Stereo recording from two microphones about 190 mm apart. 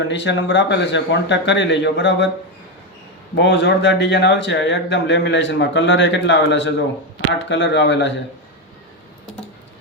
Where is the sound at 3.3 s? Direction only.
65° left (ahead or behind).